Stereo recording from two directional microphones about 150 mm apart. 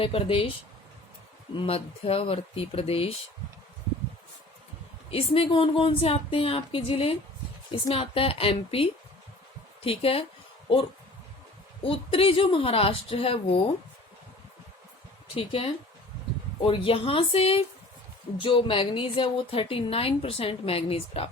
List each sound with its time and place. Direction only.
0.0 s a woman's voice: 40° left (ahead or behind)
1.5 s a woman's voice: 40° left (ahead or behind)
5.1 s a woman's voice: 40° left (ahead or behind)
15.4 s a woman's voice: 40° left (ahead or behind)